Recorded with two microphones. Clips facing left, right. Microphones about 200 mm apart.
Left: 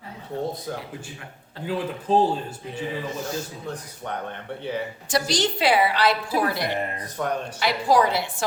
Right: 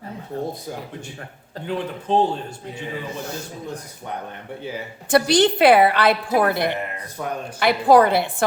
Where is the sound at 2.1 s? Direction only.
5° left (ahead or behind).